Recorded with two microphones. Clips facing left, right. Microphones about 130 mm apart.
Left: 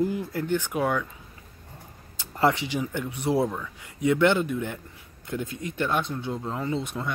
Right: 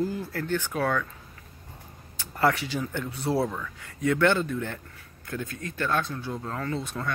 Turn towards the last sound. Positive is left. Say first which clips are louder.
# left 2 dB
turn(degrees=20)  # may be behind; listen again after turning